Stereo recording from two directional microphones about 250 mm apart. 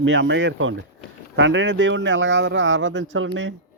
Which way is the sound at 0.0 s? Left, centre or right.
Right.